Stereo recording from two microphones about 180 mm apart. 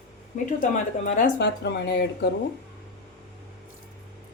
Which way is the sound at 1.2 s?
65° left (ahead or behind).